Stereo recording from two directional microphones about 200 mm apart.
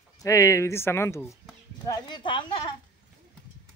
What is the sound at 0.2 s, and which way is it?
Speech, 15° left (ahead or behind).